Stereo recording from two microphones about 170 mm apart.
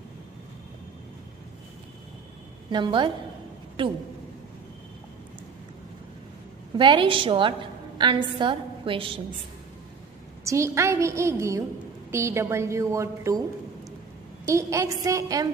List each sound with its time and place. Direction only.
2.7 s a woman's voice: 30° right (ahead or behind)
6.8 s a woman's voice: 30° right (ahead or behind)
10.4 s a woman's voice: 15° right (ahead or behind)
14.4 s a woman's voice: 15° right (ahead or behind)